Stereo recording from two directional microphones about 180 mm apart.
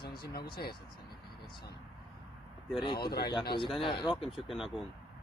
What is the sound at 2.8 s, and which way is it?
Speech, 25° left (ahead or behind).